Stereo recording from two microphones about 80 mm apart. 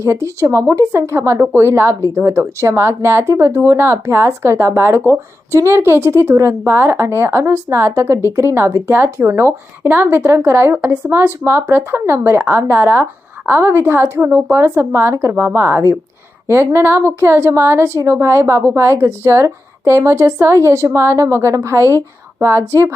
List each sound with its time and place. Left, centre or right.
0.0 s speech: right